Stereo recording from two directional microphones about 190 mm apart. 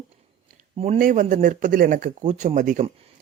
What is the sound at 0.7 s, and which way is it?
Speech, 30° right (ahead or behind).